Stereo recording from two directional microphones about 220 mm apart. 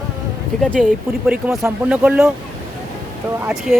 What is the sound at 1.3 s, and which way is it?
Speech, 5° right (ahead or behind).